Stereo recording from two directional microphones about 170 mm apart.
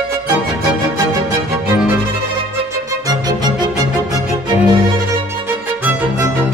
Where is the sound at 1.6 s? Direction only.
10° right (ahead or behind).